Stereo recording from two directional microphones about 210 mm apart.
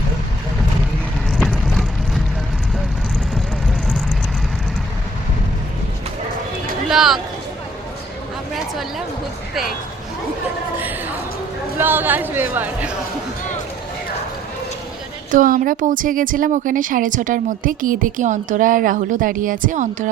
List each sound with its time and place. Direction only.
1.3 s vehicle: centre (ahead or behind)
6.9 s speech: centre (ahead or behind)
11.8 s a sound: 10° right (ahead or behind)
15.3 s a woman's voice: 40° right (ahead or behind)